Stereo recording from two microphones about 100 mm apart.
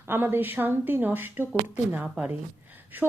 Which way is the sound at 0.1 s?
20° right (ahead or behind).